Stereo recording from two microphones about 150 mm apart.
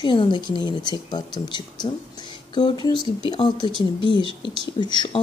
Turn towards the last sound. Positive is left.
turn(degrees=30)  # may be behind; listen again after turning